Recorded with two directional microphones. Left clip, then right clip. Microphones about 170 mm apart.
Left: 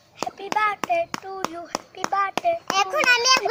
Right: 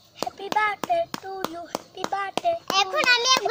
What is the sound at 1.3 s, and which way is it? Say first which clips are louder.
Speech: left 2 dB; centre (ahead or behind).